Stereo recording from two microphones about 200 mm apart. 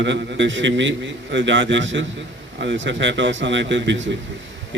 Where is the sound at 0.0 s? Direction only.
60° right (ahead or behind).